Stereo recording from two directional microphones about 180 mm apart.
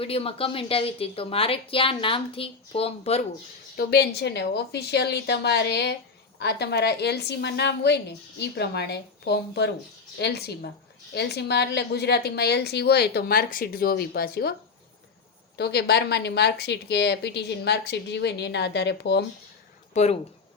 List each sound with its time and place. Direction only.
0.0 s a woman's voice: 30° left (ahead or behind)
3.8 s a woman's voice: 65° left (ahead or behind)
15.5 s speech: 65° left (ahead or behind)
19.9 s speech: 40° left (ahead or behind)